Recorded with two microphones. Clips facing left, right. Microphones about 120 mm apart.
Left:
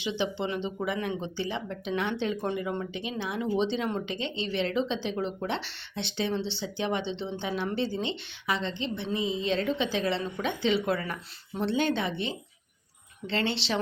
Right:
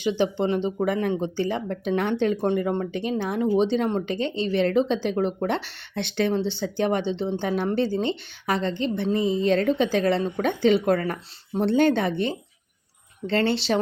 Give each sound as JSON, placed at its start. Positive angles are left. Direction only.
{"t": 0.0, "sound": "speech", "side_deg": -45}